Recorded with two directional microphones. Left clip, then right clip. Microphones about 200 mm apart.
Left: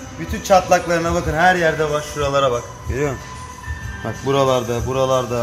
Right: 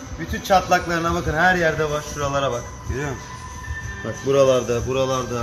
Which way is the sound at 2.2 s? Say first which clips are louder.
Left 6 dB; 20° left (ahead or behind).